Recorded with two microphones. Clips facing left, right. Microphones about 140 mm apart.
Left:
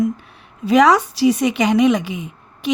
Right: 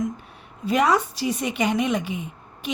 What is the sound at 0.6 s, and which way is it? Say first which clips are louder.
A woman's voice: left 7 dB; 90° left.